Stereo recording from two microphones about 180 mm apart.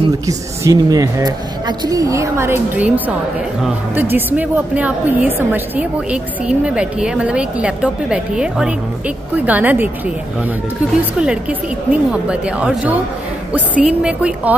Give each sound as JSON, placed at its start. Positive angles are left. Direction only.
{"t": 0.3, "sound": "a woman's voice", "side_deg": -20}
{"t": 11.9, "sound": "a woman's voice", "side_deg": -5}